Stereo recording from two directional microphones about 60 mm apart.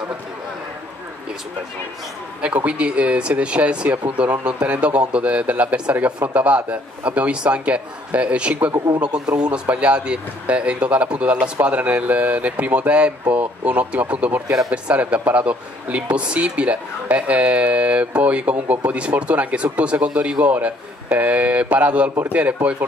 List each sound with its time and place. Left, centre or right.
2.4 s speech: right